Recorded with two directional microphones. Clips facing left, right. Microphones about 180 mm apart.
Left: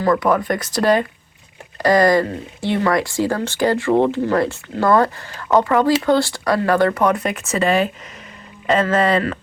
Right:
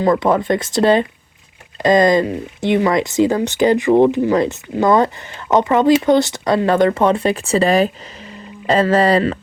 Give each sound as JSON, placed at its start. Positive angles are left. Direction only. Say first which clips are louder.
{"t": 0.0, "sound": "speech", "louder": "right 2 dB", "side_deg": -25}